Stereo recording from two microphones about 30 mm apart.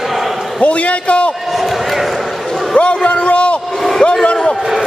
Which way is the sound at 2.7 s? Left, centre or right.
Left.